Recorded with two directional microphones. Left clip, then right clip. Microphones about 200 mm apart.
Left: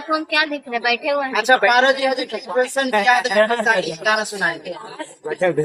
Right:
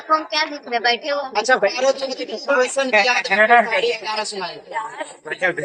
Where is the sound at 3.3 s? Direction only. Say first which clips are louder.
Right 4 dB; 90° left.